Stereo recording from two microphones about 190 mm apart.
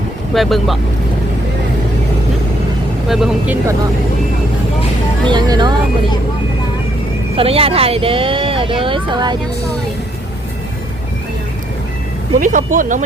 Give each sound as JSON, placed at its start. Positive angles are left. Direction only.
{"t": 0.3, "sound": "speech", "side_deg": 0}
{"t": 3.1, "sound": "speech", "side_deg": -5}
{"t": 5.3, "sound": "speech", "side_deg": -25}
{"t": 7.3, "sound": "speech", "side_deg": -30}
{"t": 12.4, "sound": "speech", "side_deg": -45}